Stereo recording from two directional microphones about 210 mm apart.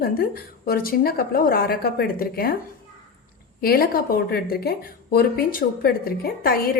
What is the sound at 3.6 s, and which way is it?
A woman's voice, 45° left (ahead or behind).